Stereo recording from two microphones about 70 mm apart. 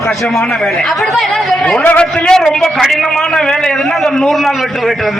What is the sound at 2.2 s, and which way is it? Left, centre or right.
Speech, centre.